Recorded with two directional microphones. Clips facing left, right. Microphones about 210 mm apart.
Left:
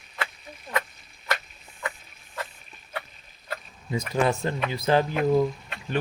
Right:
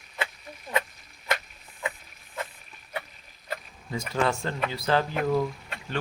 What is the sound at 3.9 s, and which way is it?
Speech, 20° left (ahead or behind).